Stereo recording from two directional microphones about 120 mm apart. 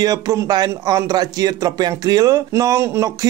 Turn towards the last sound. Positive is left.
turn(degrees=-25)  # may be behind; listen again after turning